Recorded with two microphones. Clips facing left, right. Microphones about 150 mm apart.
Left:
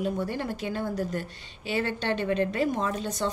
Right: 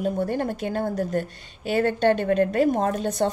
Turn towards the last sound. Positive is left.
turn(degrees=-55)  # may be behind; listen again after turning